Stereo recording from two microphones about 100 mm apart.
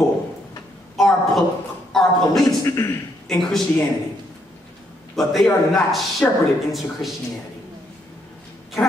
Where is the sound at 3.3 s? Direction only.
5° left (ahead or behind).